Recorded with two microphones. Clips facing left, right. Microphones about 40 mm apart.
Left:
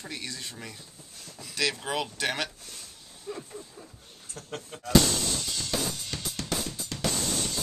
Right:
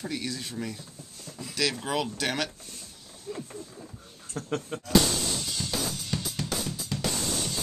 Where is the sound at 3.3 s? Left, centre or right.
Left.